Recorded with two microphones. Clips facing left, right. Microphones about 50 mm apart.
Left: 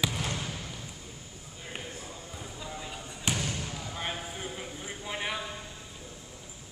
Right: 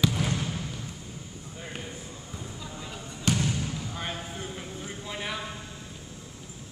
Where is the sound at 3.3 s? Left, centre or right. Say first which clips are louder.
Right 5 dB; centre.